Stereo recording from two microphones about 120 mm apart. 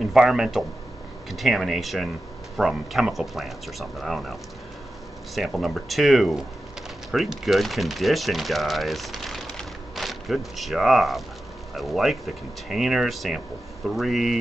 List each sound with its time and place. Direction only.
0.0 s speech: 5° right (ahead or behind)